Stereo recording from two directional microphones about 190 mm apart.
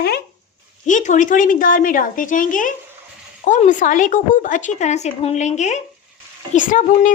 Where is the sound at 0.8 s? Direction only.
40° left (ahead or behind).